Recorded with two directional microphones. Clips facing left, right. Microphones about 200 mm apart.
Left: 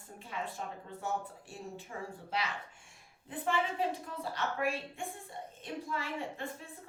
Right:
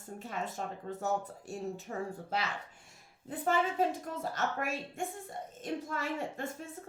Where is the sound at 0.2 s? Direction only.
45° right (ahead or behind).